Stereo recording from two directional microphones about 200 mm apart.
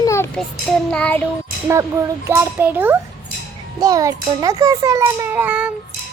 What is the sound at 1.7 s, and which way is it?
A child's voice, 15° right (ahead or behind).